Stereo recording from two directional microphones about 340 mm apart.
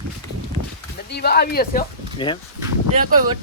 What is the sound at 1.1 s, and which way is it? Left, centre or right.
Speech, left.